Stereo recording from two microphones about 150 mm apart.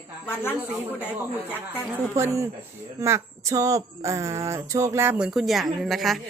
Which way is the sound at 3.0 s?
20° right (ahead or behind).